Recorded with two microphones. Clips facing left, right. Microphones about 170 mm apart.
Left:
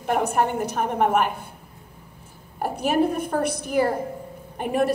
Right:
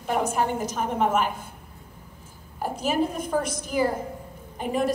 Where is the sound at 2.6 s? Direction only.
60° left (ahead or behind).